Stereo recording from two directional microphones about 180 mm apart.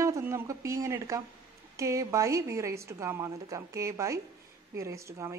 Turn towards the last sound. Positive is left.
turn(degrees=-15)  # may be behind; listen again after turning